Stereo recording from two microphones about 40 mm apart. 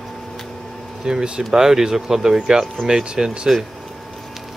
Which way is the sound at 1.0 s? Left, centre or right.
Right.